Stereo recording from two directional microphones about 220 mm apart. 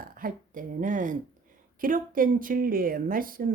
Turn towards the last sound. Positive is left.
turn(degrees=-40)  # may be behind; listen again after turning